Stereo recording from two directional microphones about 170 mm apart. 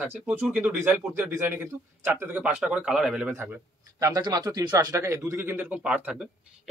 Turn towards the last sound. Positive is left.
turn(degrees=-5)  # may be behind; listen again after turning